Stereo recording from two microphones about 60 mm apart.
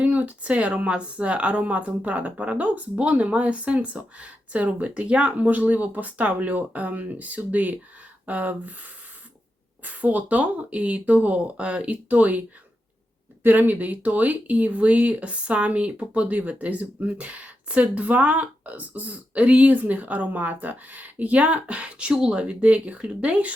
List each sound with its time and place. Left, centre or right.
0.0 s speech: right
9.8 s speech: right